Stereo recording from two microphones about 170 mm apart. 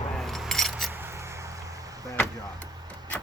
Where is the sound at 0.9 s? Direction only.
15° right (ahead or behind).